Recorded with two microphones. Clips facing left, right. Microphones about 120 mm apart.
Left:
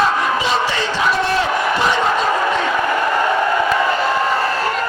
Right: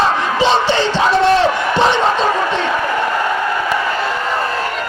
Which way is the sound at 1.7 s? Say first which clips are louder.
Right 5 dB; 30° right (ahead or behind).